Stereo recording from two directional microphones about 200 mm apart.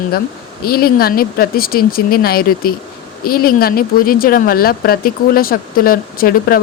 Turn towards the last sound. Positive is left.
turn(degrees=45)  # may be behind; listen again after turning